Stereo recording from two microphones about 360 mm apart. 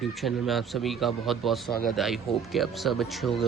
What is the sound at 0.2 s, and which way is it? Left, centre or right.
Speech, centre.